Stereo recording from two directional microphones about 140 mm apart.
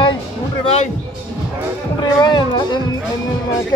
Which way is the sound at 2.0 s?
30° left (ahead or behind).